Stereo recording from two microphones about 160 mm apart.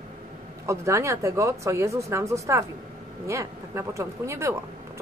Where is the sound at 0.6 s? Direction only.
20° right (ahead or behind).